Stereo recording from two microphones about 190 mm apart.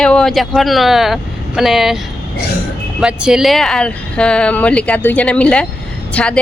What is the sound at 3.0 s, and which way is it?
Speech, 5° right (ahead or behind).